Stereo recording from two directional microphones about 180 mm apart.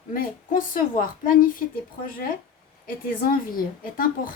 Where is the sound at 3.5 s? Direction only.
50° left (ahead or behind).